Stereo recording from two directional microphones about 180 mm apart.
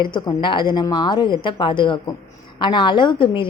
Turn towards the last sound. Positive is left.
turn(degrees=30)  # may be behind; listen again after turning